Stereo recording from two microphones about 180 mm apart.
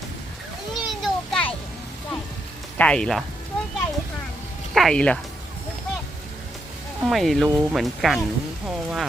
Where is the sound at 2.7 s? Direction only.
5° left (ahead or behind).